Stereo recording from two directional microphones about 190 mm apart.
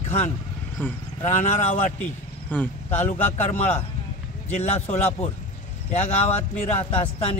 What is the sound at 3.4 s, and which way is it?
Speech, 35° left (ahead or behind).